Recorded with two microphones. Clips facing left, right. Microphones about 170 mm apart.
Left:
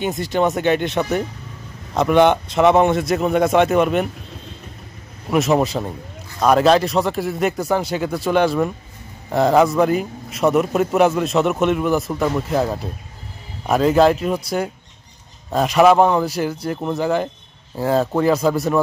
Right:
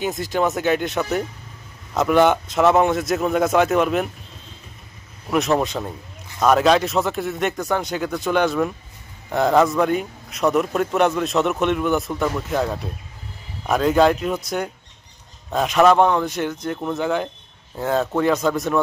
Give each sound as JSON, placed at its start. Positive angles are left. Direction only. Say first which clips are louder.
{"t": 0.3, "sound": "a man's voice", "louder": "left 3 dB", "side_deg": 0}
{"t": 5.3, "sound": "a man's voice", "louder": "left 3 dB", "side_deg": 0}